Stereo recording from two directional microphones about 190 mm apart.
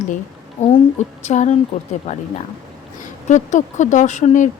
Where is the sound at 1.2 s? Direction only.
40° left (ahead or behind).